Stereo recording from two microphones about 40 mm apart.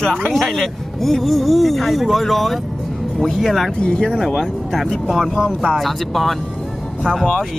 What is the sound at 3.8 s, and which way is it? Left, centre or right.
Speech, left.